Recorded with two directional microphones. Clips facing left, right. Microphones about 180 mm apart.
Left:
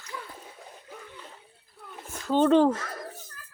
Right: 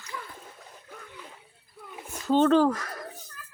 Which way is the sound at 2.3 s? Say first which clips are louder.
Even; 15° left (ahead or behind).